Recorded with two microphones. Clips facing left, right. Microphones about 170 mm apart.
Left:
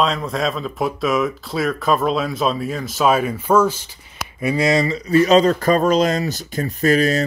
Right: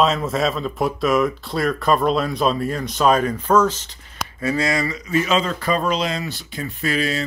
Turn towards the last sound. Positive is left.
turn(degrees=45)  # may be behind; listen again after turning